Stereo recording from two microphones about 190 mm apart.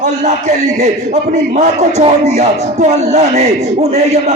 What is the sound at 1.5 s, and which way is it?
Speech, 35° right (ahead or behind).